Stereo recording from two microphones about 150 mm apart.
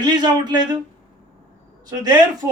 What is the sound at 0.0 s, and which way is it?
Speech, 30° right (ahead or behind).